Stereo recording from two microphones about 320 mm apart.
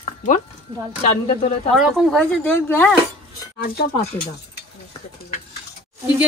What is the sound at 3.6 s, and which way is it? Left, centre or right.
Speech, left.